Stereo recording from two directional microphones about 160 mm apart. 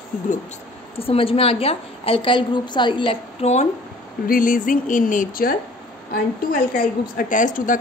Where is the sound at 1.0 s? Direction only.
35° left (ahead or behind).